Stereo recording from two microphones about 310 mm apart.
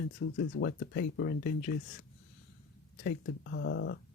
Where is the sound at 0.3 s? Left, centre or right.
Left.